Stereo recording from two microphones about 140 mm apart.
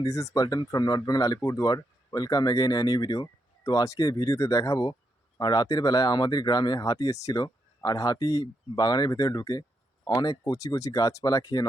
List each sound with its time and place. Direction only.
0.0 s speech: 25° left (ahead or behind)